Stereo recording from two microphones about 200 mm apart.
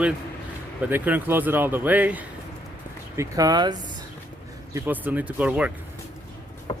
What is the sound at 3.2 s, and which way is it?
Speech, 20° right (ahead or behind).